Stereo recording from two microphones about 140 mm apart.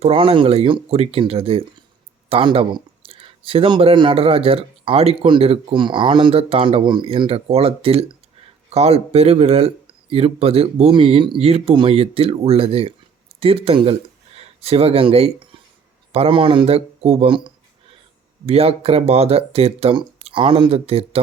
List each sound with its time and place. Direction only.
0.0 s speech: 40° right (ahead or behind)